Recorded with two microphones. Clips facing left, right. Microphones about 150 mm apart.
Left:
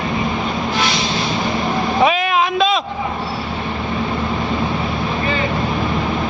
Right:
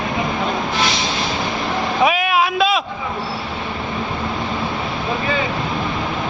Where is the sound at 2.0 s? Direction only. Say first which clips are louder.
Even; 5° right (ahead or behind).